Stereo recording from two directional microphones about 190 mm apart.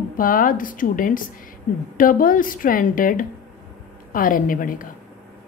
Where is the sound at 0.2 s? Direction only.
45° left (ahead or behind).